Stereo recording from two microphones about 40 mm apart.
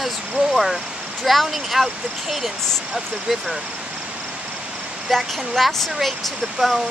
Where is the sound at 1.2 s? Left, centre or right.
Centre.